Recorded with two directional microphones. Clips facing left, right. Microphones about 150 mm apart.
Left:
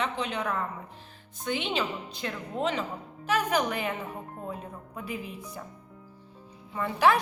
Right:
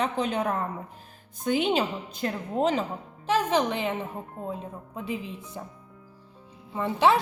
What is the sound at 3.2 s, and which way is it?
Speech, 25° right (ahead or behind).